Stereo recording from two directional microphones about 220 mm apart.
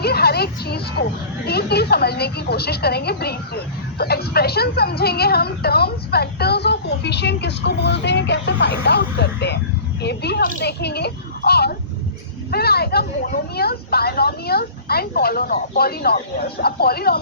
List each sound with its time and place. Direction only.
0.0 s a woman's voice: 45° left (ahead or behind)